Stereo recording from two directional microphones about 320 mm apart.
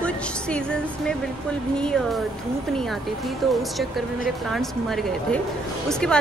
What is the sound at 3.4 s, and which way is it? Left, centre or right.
A woman's voice, centre.